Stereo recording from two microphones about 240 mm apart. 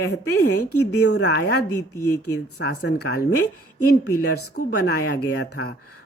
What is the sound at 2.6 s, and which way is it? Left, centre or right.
Speech, left.